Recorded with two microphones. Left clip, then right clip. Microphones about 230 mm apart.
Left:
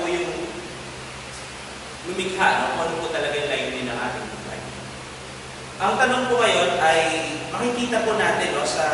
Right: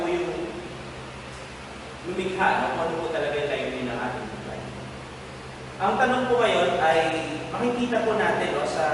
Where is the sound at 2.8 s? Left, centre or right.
Centre.